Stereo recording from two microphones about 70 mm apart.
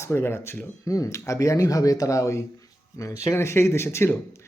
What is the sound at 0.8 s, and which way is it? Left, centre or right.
Speech, left.